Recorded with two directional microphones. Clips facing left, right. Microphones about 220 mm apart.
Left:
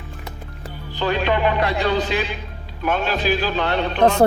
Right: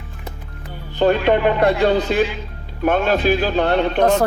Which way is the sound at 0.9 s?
50° right (ahead or behind).